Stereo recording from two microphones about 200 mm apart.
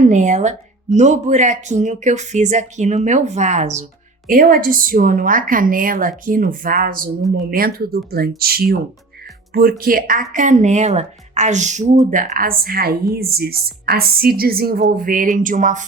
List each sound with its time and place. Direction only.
0.0 s speech: 35° right (ahead or behind)